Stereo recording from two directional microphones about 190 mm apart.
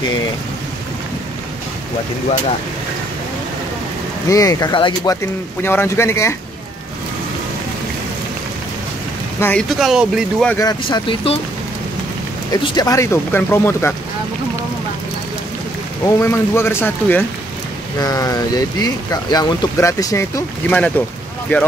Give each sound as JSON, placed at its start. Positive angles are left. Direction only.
{"t": 4.3, "sound": "speech", "side_deg": 15}
{"t": 5.6, "sound": "speech", "side_deg": 10}
{"t": 9.4, "sound": "speech", "side_deg": 5}
{"t": 10.6, "sound": "speech", "side_deg": 20}
{"t": 12.7, "sound": "speech", "side_deg": 15}
{"t": 16.2, "sound": "speech", "side_deg": 15}